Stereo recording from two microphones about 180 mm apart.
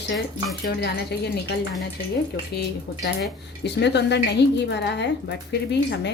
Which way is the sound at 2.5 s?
65° left (ahead or behind).